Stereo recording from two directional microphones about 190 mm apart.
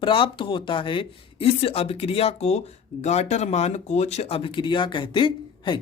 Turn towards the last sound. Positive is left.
turn(degrees=25)  # may be behind; listen again after turning